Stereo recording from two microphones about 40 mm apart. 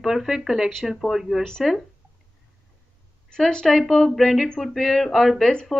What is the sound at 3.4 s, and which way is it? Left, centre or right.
Speech, centre.